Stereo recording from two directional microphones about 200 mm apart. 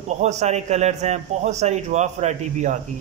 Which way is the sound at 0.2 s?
35° right (ahead or behind).